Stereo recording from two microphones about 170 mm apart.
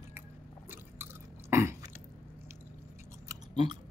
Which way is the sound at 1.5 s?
15° right (ahead or behind).